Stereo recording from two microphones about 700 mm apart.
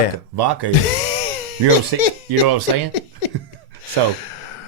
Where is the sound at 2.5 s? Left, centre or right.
Right.